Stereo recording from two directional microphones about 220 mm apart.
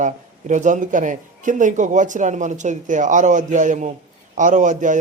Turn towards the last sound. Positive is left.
turn(degrees=-35)  # may be behind; listen again after turning